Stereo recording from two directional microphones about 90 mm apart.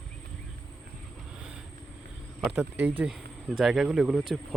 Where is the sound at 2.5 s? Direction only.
20° right (ahead or behind).